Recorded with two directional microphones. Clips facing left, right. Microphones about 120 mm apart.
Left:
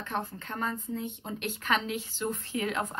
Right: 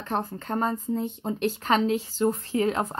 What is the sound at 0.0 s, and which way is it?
Speech, 40° right (ahead or behind).